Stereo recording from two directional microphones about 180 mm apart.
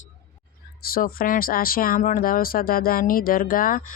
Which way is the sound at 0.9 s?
55° left (ahead or behind).